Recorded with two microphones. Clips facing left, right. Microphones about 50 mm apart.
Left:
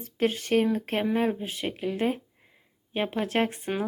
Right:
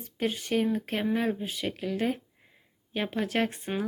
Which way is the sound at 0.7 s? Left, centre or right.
Left.